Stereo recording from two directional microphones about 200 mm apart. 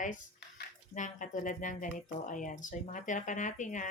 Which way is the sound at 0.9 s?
40° left (ahead or behind).